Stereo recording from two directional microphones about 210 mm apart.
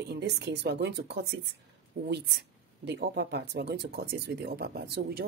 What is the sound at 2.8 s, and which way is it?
A woman's voice, 50° right (ahead or behind).